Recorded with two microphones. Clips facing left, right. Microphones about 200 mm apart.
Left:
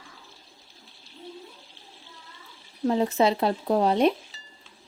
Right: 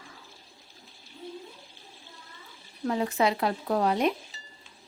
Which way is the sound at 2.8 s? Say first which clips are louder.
Left 4 dB; 25° left (ahead or behind).